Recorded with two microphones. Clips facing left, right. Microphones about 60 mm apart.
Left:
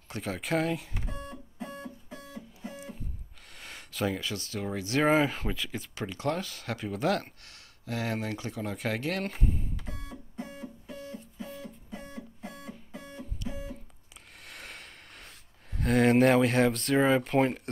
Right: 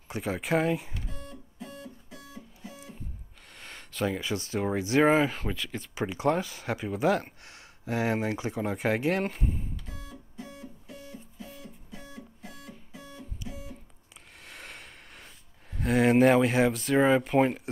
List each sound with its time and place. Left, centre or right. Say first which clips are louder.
0.1 s speech: right 3 dB; centre
1.6 s music: left 3 dB; left
3.5 s a sound: right 1 dB; centre
4.2 s speech: right 5 dB; right
5.0 s speech: left 1 dB; centre
5.9 s speech: right 5 dB; centre
9.3 s speech: left 1 dB; centre
9.8 s music: left 2 dB; left
13.4 s music: left 3 dB; centre
14.5 s a sound: even; centre
15.8 s speech: right 1 dB; centre